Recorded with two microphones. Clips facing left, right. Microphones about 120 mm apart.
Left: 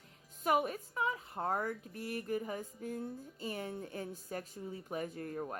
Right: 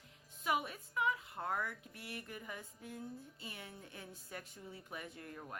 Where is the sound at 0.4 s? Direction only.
45° left (ahead or behind).